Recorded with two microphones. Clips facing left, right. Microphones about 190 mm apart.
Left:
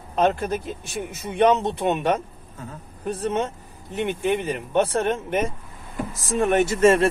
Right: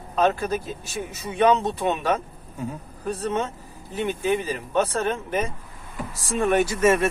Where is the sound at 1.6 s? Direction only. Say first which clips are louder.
Left 1 dB; 20° left (ahead or behind).